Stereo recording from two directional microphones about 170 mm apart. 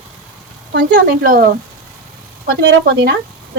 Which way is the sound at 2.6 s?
65° right (ahead or behind).